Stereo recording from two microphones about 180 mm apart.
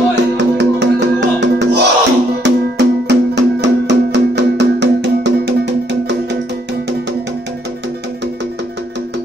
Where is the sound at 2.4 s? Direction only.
70° right (ahead or behind).